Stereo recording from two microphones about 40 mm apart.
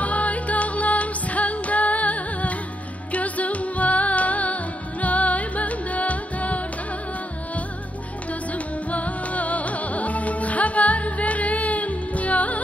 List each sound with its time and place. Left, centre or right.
0.0 s music: left
8.3 s music: left